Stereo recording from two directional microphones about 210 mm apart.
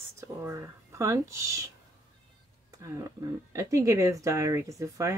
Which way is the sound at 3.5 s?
15° right (ahead or behind).